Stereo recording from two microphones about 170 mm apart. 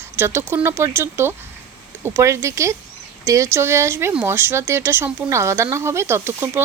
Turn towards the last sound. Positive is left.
turn(degrees=-15)  # may be behind; listen again after turning